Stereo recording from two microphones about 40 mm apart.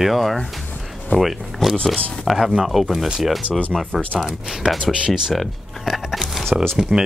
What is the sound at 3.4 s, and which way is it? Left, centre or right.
Speech, left.